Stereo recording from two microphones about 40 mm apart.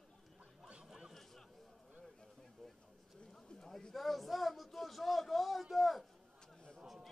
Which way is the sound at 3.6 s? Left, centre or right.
Centre.